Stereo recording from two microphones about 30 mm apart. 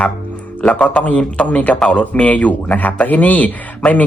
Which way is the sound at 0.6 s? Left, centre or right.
Left.